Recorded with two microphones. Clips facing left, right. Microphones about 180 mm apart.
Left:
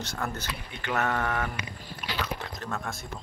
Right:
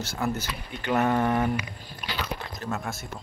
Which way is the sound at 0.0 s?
5° right (ahead or behind).